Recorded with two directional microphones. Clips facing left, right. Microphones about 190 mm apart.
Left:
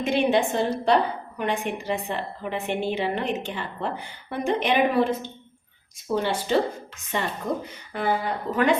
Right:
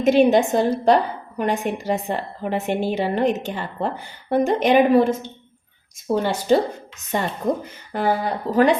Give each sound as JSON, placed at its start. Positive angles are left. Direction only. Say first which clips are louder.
{"t": 0.0, "sound": "a woman's voice", "louder": "right 6 dB", "side_deg": -45}